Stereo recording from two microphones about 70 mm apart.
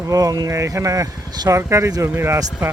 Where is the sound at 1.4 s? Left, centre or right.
Right.